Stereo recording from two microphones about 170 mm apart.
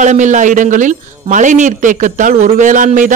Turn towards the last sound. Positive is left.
turn(degrees=-50)  # may be behind; listen again after turning